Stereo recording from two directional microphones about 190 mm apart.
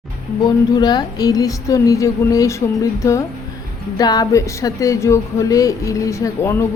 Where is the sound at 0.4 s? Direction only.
20° left (ahead or behind).